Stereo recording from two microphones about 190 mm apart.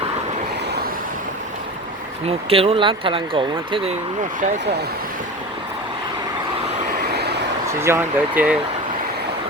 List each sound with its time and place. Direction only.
2.2 s speech: 30° right (ahead or behind)
7.7 s speech: 15° right (ahead or behind)